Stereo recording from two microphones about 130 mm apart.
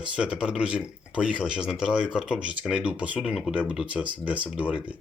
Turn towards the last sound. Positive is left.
turn(degrees=-10)  # may be behind; listen again after turning